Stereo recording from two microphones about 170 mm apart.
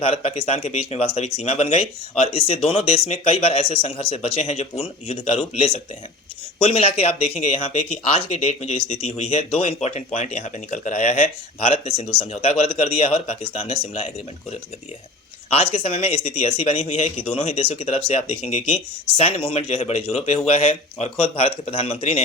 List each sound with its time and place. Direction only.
0.0 s speech: 35° left (ahead or behind)
15.4 s speech: 35° left (ahead or behind)